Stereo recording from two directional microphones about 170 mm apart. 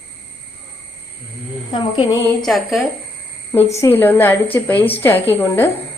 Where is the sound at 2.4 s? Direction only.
Centre (ahead or behind).